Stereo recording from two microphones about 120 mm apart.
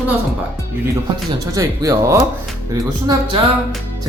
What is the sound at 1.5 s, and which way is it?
Speech, 30° right (ahead or behind).